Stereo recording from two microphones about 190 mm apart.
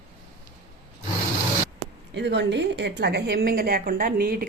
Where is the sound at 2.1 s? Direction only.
70° right (ahead or behind).